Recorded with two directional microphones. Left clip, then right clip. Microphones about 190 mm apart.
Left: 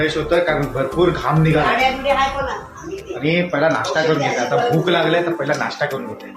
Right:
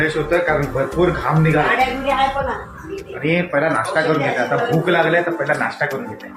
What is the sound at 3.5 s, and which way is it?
Speech, 5° left (ahead or behind).